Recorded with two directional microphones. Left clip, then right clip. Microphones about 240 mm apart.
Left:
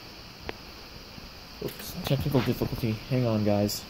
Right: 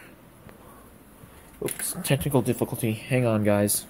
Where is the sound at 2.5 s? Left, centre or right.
Centre.